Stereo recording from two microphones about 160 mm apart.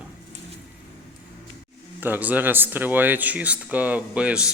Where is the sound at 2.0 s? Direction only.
10° right (ahead or behind).